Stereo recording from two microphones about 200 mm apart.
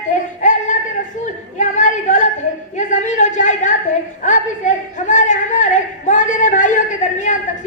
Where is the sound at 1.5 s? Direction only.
35° left (ahead or behind).